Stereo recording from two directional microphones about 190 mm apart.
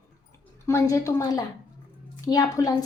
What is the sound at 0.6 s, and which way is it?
A woman's voice, 15° left (ahead or behind).